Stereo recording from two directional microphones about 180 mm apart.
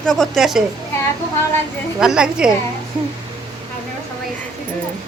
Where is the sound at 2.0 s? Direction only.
5° right (ahead or behind).